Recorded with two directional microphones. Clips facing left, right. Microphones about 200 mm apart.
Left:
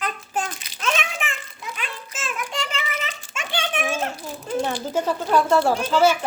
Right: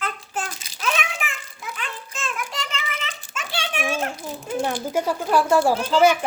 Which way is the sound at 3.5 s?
5° right (ahead or behind).